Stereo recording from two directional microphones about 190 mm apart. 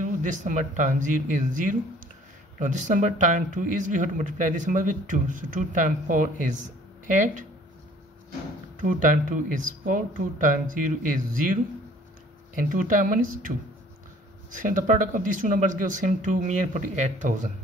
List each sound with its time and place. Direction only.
0.0 s speech: 40° right (ahead or behind)
8.8 s speech: 45° right (ahead or behind)
12.6 s speech: 45° right (ahead or behind)
14.5 s speech: 45° right (ahead or behind)